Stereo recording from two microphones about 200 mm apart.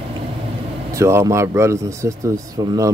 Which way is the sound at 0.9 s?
15° right (ahead or behind).